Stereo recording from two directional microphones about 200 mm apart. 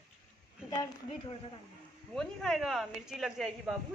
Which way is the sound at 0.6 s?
20° left (ahead or behind).